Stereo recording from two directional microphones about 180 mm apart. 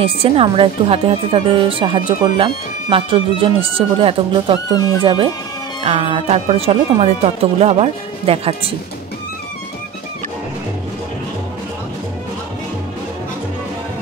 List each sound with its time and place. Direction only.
0.0 s speech: 30° right (ahead or behind)